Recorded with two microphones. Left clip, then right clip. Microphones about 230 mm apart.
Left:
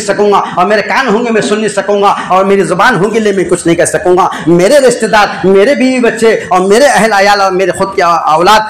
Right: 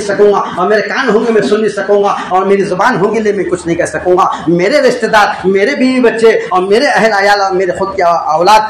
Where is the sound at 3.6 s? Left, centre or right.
Left.